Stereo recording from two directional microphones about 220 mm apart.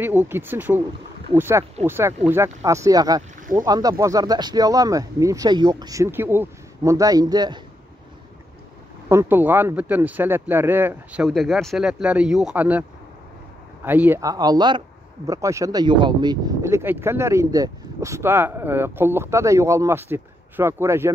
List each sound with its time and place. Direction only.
0.0 s speech: 10° right (ahead or behind)
9.1 s speech: 10° right (ahead or behind)
13.8 s speech: 10° right (ahead or behind)